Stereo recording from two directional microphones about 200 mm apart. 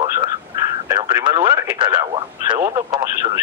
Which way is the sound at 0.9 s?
20° right (ahead or behind).